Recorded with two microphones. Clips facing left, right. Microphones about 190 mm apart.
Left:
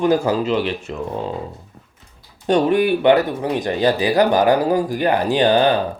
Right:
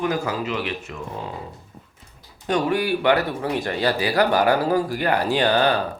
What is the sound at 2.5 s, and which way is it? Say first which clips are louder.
Speech: left 6 dB; 25° left (ahead or behind).